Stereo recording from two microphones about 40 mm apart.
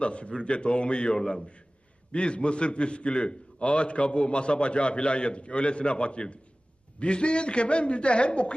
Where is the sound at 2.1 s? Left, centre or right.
Left.